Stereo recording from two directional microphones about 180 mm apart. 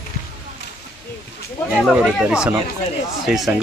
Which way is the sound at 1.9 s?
5° right (ahead or behind).